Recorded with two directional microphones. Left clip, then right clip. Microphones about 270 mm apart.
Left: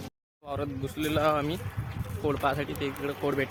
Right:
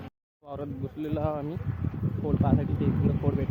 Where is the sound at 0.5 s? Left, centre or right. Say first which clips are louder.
Left 3 dB; centre.